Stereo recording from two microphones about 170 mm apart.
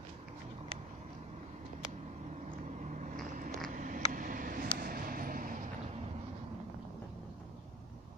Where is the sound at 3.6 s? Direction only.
50° right (ahead or behind).